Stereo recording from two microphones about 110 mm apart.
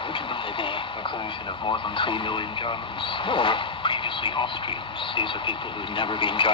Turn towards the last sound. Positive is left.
turn(degrees=50)  # may be behind; listen again after turning